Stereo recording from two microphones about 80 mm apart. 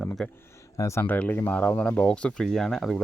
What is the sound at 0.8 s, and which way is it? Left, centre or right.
Speech, left.